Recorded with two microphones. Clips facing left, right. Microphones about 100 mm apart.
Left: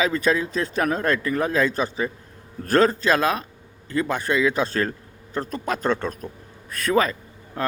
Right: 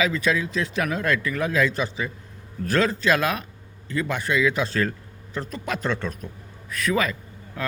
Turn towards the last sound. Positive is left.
turn(degrees=35)  # may be behind; listen again after turning